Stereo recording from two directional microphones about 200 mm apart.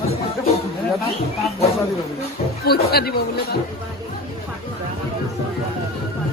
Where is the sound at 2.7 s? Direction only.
50° left (ahead or behind).